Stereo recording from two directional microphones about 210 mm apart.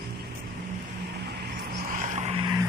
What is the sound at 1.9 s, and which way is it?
Vehicle, 35° right (ahead or behind).